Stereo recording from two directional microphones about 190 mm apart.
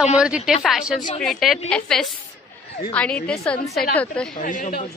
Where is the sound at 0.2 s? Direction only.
5° right (ahead or behind).